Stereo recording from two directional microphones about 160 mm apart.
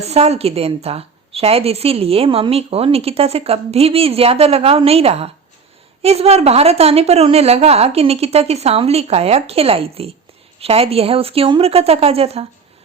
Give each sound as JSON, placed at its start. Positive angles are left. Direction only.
{"t": 0.0, "sound": "a woman's voice", "side_deg": -40}